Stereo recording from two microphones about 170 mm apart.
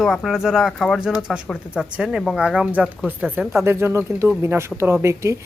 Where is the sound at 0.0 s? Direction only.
Centre (ahead or behind).